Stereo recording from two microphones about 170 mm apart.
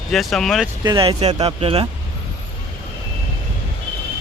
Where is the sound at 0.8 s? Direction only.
30° right (ahead or behind).